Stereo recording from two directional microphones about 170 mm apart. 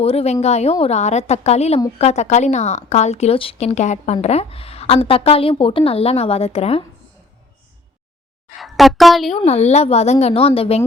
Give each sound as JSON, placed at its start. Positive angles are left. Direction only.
{"t": 0.0, "sound": "a woman's voice", "side_deg": 35}
{"t": 8.5, "sound": "a woman's voice", "side_deg": 0}
{"t": 9.4, "sound": "a woman's voice", "side_deg": 40}